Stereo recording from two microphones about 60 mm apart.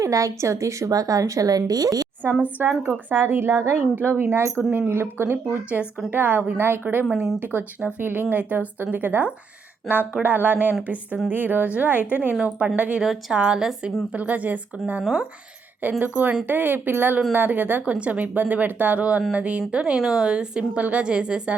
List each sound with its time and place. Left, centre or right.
0.0 s a woman's voice: right
2.4 s speech: right
2.8 s speech: right
3.2 s speech: right
9.9 s speech: centre
10.2 s a woman's voice: right; by 13.9 s centre
14.2 s speech: right
20.0 s a woman's voice: centre